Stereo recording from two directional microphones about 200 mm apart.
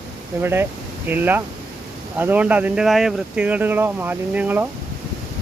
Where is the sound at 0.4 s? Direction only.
10° right (ahead or behind).